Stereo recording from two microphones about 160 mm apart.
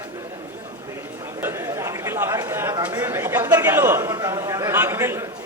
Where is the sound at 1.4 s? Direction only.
15° right (ahead or behind).